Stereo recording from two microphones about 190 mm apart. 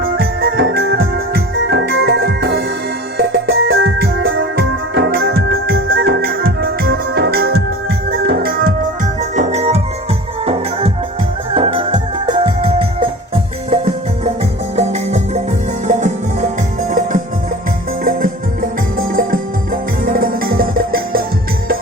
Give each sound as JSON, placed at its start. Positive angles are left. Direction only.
{"t": 0.0, "sound": "music", "side_deg": -55}
{"t": 9.3, "sound": "music", "side_deg": -40}
{"t": 14.8, "sound": "music", "side_deg": -35}
{"t": 18.9, "sound": "music", "side_deg": -50}